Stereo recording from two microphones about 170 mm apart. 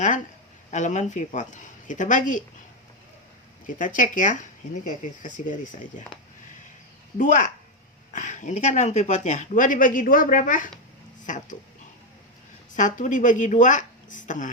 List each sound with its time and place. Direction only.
0.7 s speech: 45° left (ahead or behind)
3.7 s speech: 50° left (ahead or behind)
7.2 s speech: 45° left (ahead or behind)
12.7 s speech: 50° left (ahead or behind)